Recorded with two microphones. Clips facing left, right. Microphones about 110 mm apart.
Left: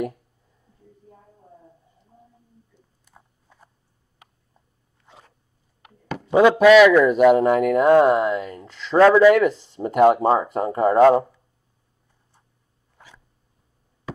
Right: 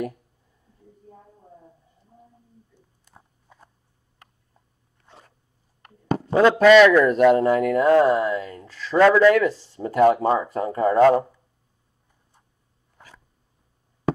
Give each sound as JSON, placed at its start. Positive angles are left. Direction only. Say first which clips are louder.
{"t": 6.0, "sound": "a sound", "louder": "right 7 dB", "side_deg": -40}
{"t": 6.6, "sound": "a man's voice", "louder": "even", "side_deg": 5}
{"t": 7.4, "sound": "speech", "louder": "left 2 dB", "side_deg": 20}